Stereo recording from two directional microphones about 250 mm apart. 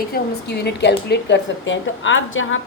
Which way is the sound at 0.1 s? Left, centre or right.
Left.